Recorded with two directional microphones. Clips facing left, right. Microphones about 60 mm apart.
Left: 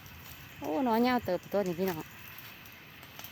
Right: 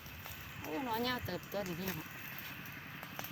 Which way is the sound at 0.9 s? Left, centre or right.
Left.